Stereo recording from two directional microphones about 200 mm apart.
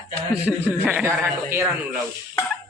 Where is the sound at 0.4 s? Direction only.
5° right (ahead or behind).